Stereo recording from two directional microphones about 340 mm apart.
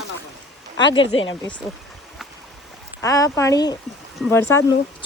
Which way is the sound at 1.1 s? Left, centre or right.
Left.